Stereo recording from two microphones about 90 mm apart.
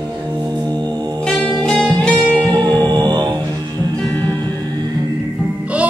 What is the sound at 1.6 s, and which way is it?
Music, 10° left (ahead or behind).